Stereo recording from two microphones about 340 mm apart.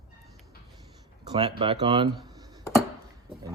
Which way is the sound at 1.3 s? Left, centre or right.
Centre.